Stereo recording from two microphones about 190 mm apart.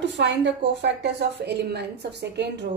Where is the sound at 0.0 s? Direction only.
70° right (ahead or behind).